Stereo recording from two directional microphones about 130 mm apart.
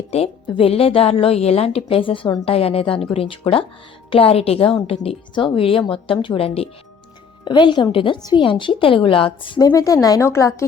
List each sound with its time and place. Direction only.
0.4 s a woman's voice: 40° left (ahead or behind)
7.4 s a woman's voice: 35° left (ahead or behind)
9.6 s speech: 25° left (ahead or behind)